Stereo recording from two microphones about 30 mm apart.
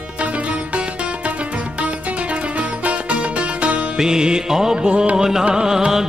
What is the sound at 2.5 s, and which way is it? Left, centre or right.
Music, right.